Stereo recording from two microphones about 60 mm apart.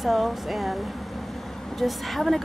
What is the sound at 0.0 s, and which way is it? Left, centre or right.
Speech, centre.